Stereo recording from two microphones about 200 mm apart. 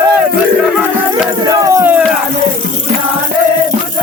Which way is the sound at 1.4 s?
20° right (ahead or behind).